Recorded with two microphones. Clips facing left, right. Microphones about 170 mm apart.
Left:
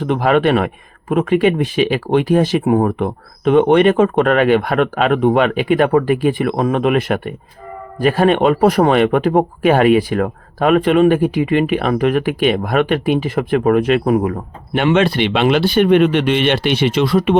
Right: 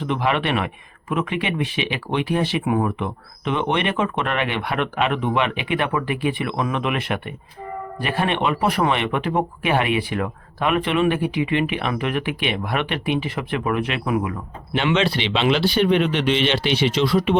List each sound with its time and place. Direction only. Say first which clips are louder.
0.0 s speech: left 8 dB; 45° left (ahead or behind)